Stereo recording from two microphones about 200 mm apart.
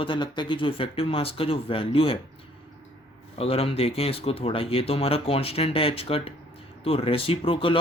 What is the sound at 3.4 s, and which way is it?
Speech, 30° left (ahead or behind).